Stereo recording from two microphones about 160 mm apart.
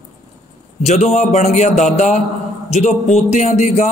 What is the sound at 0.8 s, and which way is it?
A man's voice, 45° left (ahead or behind).